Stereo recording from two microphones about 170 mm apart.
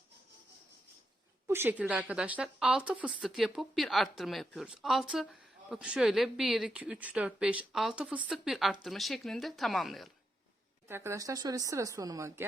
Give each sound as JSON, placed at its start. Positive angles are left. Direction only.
{"t": 1.5, "sound": "a woman's voice", "side_deg": -15}
{"t": 10.8, "sound": "speech", "side_deg": -15}